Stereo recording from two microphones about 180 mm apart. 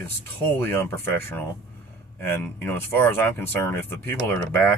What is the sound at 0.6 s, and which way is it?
Speech, 15° left (ahead or behind).